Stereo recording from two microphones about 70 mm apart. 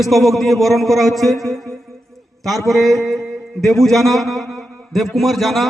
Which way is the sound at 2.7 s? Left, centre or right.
Centre.